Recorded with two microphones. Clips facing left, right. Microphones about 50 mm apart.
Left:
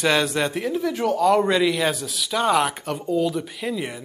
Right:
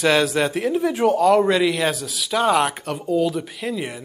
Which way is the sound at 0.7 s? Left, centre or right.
Centre.